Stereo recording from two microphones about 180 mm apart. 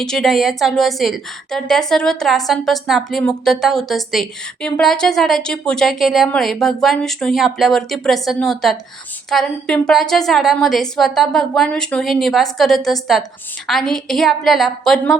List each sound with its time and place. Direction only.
0.0 s a woman's voice: 5° left (ahead or behind)